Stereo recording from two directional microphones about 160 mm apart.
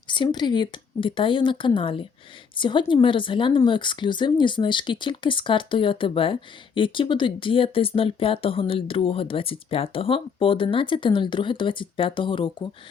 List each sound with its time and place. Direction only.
0.1 s speech: 30° left (ahead or behind)